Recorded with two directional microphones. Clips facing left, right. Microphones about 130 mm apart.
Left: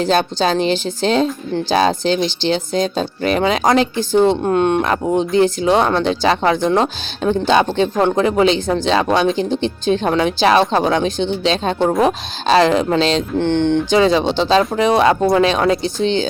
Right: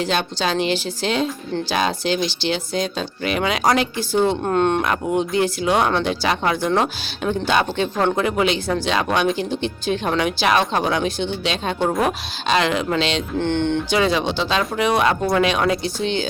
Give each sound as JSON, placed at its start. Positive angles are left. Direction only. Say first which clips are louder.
{"t": 0.0, "sound": "speech", "louder": "left 6 dB", "side_deg": 35}
{"t": 4.4, "sound": "speech", "louder": "left 3 dB", "side_deg": 15}
{"t": 4.8, "sound": "speech", "louder": "left 4 dB", "side_deg": 30}
{"t": 7.9, "sound": "speech", "louder": "left 3 dB", "side_deg": 20}
{"t": 8.2, "sound": "speech", "louder": "left 5 dB", "side_deg": 30}
{"t": 13.4, "sound": "speech", "louder": "left 4 dB", "side_deg": 15}
{"t": 13.9, "sound": "speech", "louder": "left 6 dB", "side_deg": 30}